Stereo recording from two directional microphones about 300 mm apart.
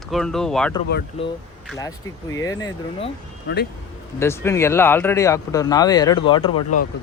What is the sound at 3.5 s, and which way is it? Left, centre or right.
Speech, left.